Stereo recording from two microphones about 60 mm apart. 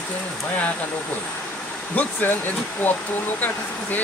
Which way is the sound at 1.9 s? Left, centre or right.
Left.